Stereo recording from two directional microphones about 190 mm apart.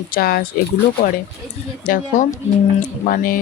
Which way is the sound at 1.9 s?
45° left (ahead or behind).